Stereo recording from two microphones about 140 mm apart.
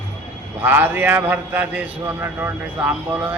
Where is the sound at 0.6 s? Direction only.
15° right (ahead or behind).